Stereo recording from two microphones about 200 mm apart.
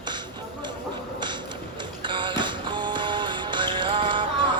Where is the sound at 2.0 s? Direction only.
25° right (ahead or behind).